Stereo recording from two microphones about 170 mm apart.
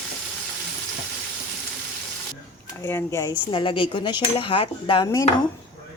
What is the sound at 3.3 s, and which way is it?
A woman's voice, 30° left (ahead or behind).